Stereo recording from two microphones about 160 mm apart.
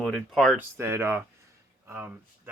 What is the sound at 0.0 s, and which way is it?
Speech, centre (ahead or behind).